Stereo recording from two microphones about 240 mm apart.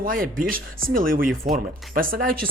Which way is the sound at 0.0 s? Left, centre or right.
Right.